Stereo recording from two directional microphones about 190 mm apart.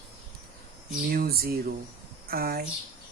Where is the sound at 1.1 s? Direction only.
50° right (ahead or behind).